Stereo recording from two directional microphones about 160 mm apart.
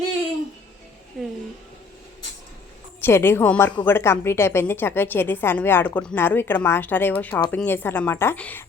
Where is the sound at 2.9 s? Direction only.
15° left (ahead or behind).